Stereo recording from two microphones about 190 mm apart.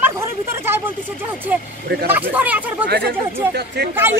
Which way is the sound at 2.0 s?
10° right (ahead or behind).